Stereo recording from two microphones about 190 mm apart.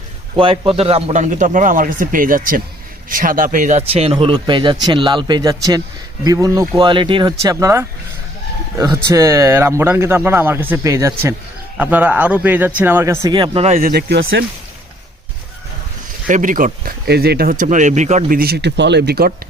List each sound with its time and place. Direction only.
0.3 s speech: 25° right (ahead or behind)
13.7 s speech: 55° right (ahead or behind)
16.2 s speech: 45° right (ahead or behind)